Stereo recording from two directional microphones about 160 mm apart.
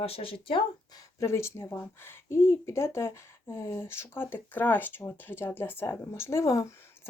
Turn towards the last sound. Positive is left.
turn(degrees=20)  # may be behind; listen again after turning